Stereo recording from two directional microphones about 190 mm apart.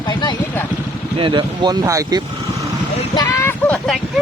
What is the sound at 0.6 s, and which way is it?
Speech, 10° left (ahead or behind).